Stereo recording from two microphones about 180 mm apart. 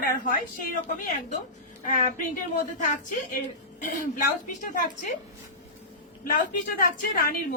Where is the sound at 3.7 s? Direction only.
45° left (ahead or behind).